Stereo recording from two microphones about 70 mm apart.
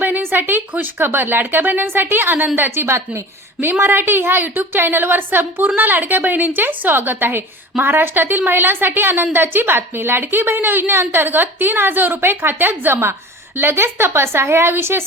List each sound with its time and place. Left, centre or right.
0.0 s a woman's voice: right